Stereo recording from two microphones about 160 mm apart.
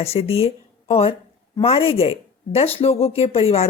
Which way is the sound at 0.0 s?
40° left (ahead or behind).